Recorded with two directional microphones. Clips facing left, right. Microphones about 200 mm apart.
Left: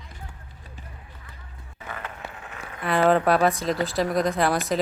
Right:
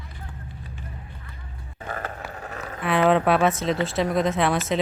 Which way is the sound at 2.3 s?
40° right (ahead or behind).